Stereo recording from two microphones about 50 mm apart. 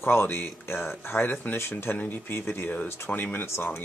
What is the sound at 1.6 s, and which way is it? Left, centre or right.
Speech, left.